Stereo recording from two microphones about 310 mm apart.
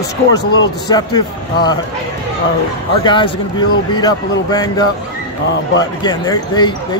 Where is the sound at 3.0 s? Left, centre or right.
Centre.